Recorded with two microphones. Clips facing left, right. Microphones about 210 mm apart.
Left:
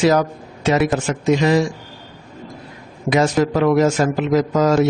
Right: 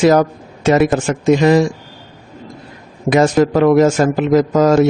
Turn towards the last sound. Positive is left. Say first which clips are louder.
# right 4 dB
turn(degrees=-50)  # may be behind; listen again after turning